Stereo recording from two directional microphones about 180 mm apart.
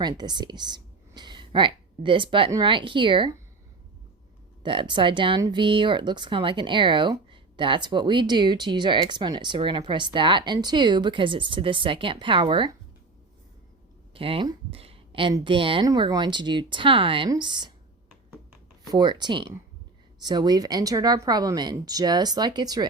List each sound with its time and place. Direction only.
0.0 s speech: 25° right (ahead or behind)
4.6 s speech: 25° right (ahead or behind)
14.1 s speech: 30° right (ahead or behind)
18.9 s speech: 25° right (ahead or behind)